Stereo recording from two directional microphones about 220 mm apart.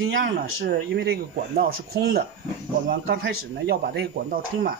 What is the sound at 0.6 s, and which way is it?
Speech, 45° right (ahead or behind).